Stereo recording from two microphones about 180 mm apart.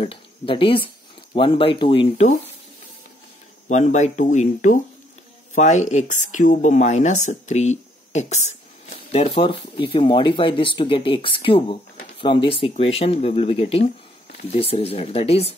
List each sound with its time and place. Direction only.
0.0 s speech: 30° left (ahead or behind)
3.6 s speech: 40° left (ahead or behind)